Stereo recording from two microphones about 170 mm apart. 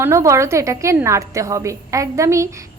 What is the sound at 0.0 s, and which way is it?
A woman's voice, 15° right (ahead or behind).